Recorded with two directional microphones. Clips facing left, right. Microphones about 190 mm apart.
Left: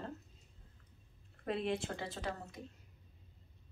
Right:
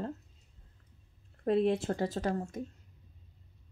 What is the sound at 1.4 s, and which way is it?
Speech, 40° right (ahead or behind).